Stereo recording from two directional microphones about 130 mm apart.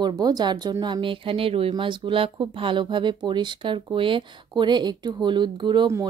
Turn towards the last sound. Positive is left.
turn(degrees=-35)  # may be behind; listen again after turning